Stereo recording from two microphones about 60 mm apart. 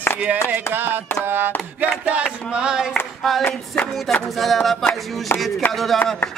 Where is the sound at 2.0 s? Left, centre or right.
Centre.